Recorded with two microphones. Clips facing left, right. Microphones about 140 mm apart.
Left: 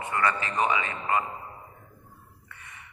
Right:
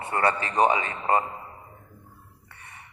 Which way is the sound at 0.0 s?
35° right (ahead or behind).